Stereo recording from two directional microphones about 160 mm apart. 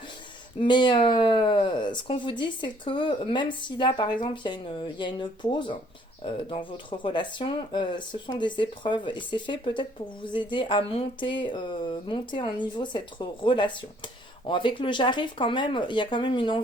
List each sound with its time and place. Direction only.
0.6 s speech: 30° left (ahead or behind)